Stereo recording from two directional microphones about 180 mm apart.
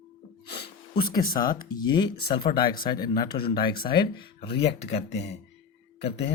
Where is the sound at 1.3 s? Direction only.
25° left (ahead or behind).